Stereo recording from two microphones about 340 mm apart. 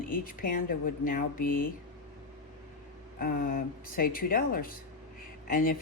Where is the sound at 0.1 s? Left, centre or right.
Left.